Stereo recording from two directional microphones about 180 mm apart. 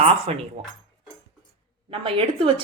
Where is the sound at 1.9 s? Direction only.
30° right (ahead or behind).